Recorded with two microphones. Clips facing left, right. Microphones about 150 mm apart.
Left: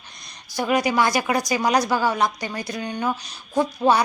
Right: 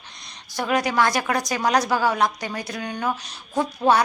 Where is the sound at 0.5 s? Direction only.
Centre (ahead or behind).